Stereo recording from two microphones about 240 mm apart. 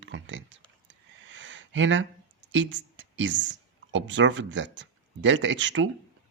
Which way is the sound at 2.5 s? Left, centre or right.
Right.